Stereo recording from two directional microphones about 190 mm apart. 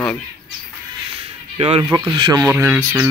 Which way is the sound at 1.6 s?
30° right (ahead or behind).